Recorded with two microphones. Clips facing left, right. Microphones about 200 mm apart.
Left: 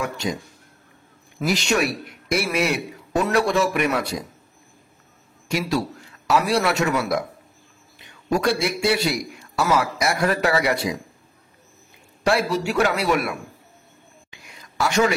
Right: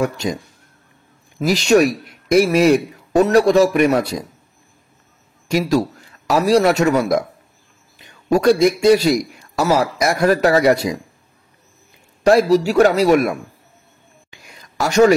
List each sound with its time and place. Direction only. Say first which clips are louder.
1.5 s a man's voice: right 8 dB; 40° right (ahead or behind)
5.5 s a man's voice: right 7 dB; 40° right (ahead or behind)
8.3 s a man's voice: right 8 dB; 40° right (ahead or behind)
12.2 s a man's voice: right 9 dB; 40° right (ahead or behind)
14.8 s a man's voice: right 8 dB; 40° right (ahead or behind)